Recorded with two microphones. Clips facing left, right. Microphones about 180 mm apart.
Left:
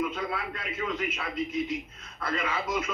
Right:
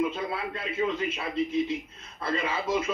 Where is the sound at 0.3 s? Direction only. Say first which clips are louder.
Right 2 dB; 25° right (ahead or behind).